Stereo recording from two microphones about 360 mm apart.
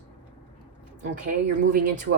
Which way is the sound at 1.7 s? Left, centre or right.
Right.